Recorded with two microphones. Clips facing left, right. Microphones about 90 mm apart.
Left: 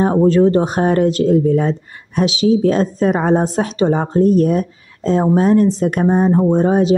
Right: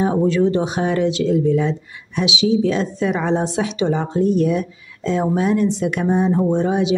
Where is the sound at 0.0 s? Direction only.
45° left (ahead or behind).